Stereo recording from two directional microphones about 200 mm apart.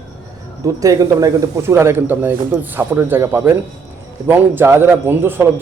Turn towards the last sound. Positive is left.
turn(degrees=-10)  # may be behind; listen again after turning